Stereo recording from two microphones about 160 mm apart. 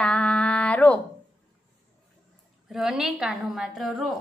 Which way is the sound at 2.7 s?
5° right (ahead or behind).